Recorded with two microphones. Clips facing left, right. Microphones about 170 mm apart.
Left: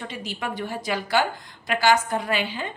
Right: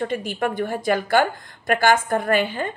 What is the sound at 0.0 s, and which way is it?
A woman's voice, 50° right (ahead or behind).